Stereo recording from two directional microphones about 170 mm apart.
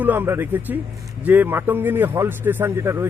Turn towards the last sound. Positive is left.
turn(degrees=-15)  # may be behind; listen again after turning